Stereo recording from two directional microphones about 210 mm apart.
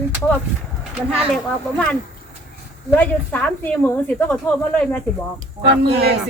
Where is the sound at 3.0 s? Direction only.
5° left (ahead or behind).